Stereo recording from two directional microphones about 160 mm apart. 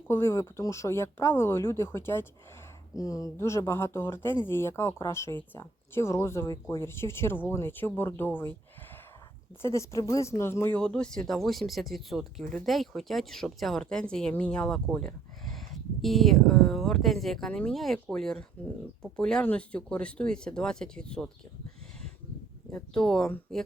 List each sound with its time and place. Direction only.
0.1 s speech: 15° left (ahead or behind)
9.6 s speech: 20° left (ahead or behind)
22.7 s speech: 5° left (ahead or behind)